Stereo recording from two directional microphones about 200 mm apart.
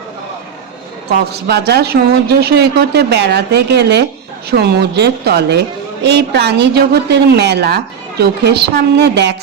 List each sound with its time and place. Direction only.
1.3 s a woman's voice: 55° right (ahead or behind)